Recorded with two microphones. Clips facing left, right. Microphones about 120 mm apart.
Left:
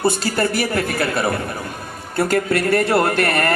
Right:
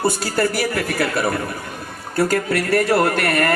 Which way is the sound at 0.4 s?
25° left (ahead or behind).